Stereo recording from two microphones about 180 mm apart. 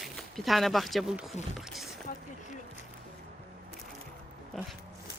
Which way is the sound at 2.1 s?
55° left (ahead or behind).